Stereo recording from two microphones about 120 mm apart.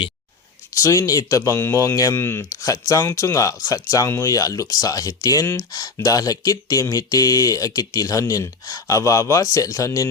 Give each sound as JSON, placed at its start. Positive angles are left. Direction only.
{"t": 0.8, "sound": "speech", "side_deg": 25}